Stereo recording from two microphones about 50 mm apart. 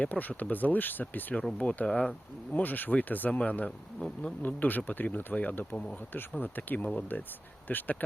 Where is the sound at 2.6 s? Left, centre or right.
Left.